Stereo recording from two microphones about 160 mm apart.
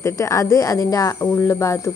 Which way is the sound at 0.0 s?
20° left (ahead or behind).